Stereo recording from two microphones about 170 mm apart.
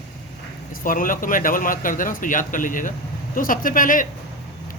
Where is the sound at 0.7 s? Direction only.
55° left (ahead or behind).